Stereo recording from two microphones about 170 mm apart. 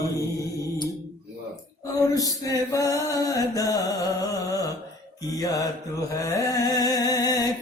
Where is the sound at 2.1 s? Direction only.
20° left (ahead or behind).